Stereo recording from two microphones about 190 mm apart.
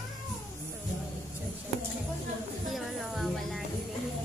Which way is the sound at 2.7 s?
Centre (ahead or behind).